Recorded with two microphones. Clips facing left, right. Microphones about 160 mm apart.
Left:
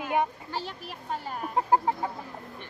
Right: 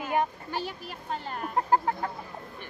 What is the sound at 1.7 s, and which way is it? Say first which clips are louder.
Speech: left 1 dB; 15° left (ahead or behind).